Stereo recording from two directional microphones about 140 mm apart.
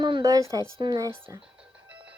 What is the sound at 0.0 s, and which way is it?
Speech, 30° right (ahead or behind).